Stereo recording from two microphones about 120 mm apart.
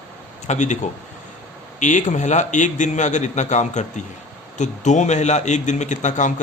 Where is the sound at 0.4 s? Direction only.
80° left.